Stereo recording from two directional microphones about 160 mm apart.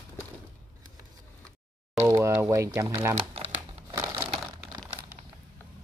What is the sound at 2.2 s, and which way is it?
Speech, 15° right (ahead or behind).